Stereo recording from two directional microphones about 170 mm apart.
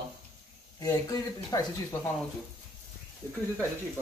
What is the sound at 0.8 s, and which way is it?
Speech, 20° left (ahead or behind).